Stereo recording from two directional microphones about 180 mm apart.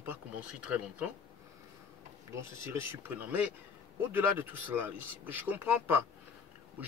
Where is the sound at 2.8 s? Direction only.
10° right (ahead or behind).